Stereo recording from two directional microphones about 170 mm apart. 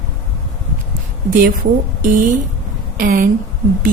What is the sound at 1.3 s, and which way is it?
Speech, 55° right (ahead or behind).